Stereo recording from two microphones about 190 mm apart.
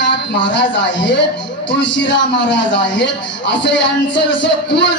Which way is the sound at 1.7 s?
70° left (ahead or behind).